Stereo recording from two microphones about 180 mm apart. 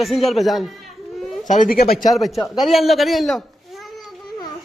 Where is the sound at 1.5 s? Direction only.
50° left (ahead or behind).